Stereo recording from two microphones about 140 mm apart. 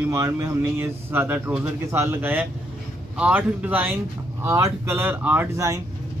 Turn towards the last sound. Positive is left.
turn(degrees=-20)  # may be behind; listen again after turning